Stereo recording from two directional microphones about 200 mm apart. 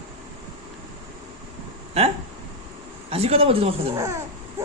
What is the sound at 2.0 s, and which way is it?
Speech, 30° right (ahead or behind).